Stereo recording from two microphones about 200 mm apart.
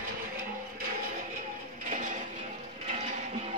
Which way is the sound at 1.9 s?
40° right (ahead or behind).